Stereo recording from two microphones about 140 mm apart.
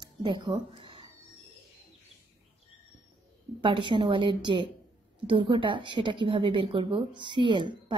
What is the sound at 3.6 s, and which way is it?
A woman's voice, 35° right (ahead or behind).